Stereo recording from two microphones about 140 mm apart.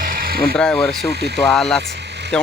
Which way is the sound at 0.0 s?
90° right.